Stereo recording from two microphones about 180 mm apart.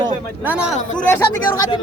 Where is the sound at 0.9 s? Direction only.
10° left (ahead or behind).